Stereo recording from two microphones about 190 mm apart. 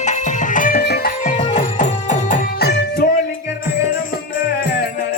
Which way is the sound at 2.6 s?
60° left (ahead or behind).